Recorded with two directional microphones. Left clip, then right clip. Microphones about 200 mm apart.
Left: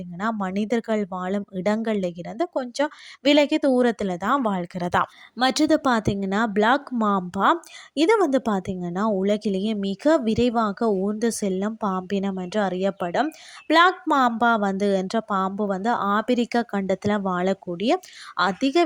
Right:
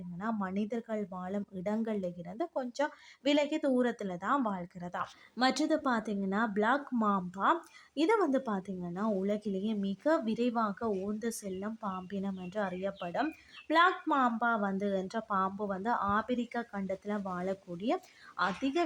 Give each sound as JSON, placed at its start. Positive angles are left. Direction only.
{"t": 0.2, "sound": "speech", "side_deg": 35}